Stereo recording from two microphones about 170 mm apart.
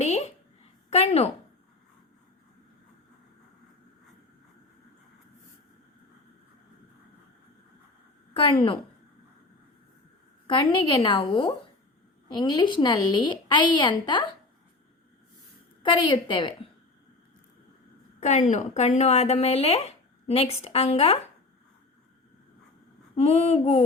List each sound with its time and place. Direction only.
0.0 s a sound: 40° left (ahead or behind)
8.3 s a woman's voice: 30° left (ahead or behind)
10.4 s a woman's voice: 30° left (ahead or behind)
15.8 s a woman's voice: 30° left (ahead or behind)
18.2 s a woman's voice: 45° left (ahead or behind)
23.1 s speech: 40° left (ahead or behind)